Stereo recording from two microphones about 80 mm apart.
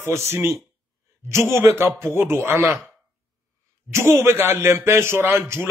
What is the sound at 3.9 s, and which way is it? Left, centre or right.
A man's voice, right.